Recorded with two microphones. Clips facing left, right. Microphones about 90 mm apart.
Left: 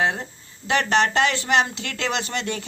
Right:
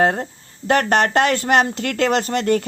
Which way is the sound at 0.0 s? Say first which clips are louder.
Right 6 dB; 45° right (ahead or behind).